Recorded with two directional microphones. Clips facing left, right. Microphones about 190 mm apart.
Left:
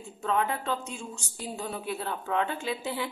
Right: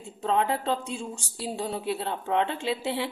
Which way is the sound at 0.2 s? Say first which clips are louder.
Right 3 dB; 30° right (ahead or behind).